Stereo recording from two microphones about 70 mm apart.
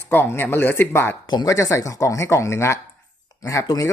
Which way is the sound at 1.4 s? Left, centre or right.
Left.